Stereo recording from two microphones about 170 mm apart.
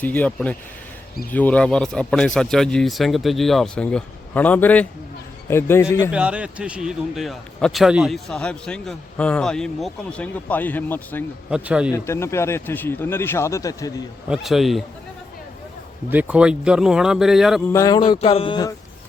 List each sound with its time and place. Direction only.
0.0 s a man's voice: 10° left (ahead or behind)
6.1 s a man's voice: 5° right (ahead or behind); by 11.2 s 10° left (ahead or behind)
11.5 s speech: 5° right (ahead or behind)
11.9 s speech: 15° left (ahead or behind)
14.3 s a man's voice: centre (ahead or behind)
16.0 s a man's voice: 10° right (ahead or behind)
17.7 s speech: 20° left (ahead or behind)